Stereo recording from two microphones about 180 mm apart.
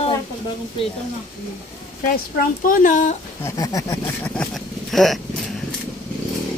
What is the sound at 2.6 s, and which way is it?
Speech, 50° left (ahead or behind).